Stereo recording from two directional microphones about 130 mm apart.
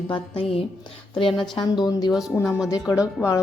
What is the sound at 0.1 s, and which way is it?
Speech, 45° left (ahead or behind).